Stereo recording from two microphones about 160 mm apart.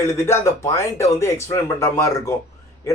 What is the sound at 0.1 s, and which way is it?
Speech, 20° left (ahead or behind).